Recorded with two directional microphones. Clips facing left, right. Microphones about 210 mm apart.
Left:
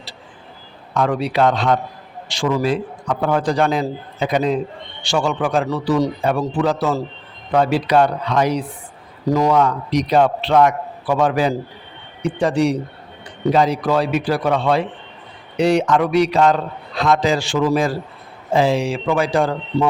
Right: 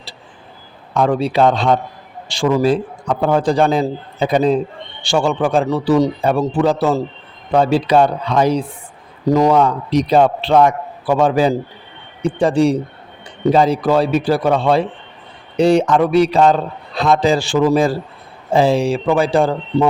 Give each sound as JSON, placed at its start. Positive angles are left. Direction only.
{"t": 0.9, "sound": "a man's voice", "side_deg": -30}